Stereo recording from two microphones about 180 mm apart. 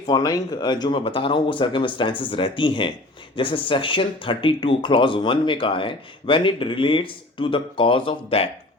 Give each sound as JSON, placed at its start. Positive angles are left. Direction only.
{"t": 0.0, "sound": "speech", "side_deg": 20}